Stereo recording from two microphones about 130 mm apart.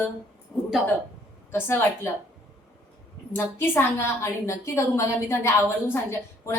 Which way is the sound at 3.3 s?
20° left (ahead or behind).